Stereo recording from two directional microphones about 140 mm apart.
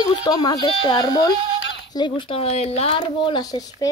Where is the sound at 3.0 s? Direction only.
30° left (ahead or behind).